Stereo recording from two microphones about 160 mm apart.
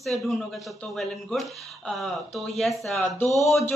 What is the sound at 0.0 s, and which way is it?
Speech, centre (ahead or behind).